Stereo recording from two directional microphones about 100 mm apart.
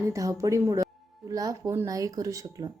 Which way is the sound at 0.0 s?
30° right (ahead or behind).